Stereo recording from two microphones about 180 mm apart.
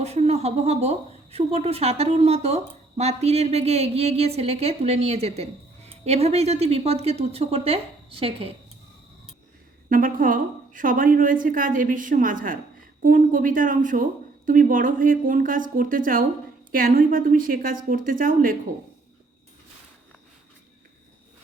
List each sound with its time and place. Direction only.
0.0 s a woman's voice: 35° right (ahead or behind)
9.9 s speech: 50° right (ahead or behind)